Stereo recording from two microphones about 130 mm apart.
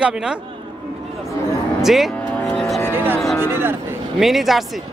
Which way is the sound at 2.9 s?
15° right (ahead or behind).